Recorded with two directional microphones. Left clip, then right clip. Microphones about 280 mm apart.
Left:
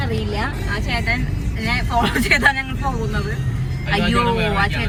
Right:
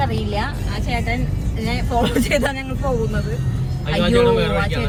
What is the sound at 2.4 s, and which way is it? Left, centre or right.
Speech, left.